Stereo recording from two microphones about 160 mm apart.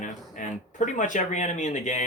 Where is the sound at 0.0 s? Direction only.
55° left (ahead or behind).